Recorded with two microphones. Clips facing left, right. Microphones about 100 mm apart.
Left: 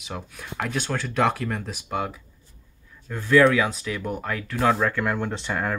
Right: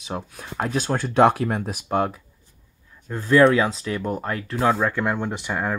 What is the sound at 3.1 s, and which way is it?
Speech, 30° right (ahead or behind).